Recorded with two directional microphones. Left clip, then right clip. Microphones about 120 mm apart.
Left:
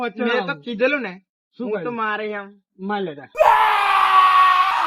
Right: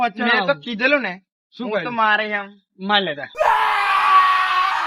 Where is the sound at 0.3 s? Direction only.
60° right (ahead or behind); by 1.1 s 80° right.